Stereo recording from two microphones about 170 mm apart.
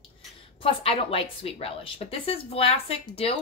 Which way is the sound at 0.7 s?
30° left (ahead or behind).